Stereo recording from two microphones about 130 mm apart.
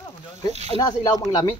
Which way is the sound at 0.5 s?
55° right (ahead or behind).